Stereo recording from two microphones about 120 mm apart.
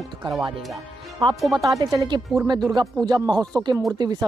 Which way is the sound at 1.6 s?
30° right (ahead or behind).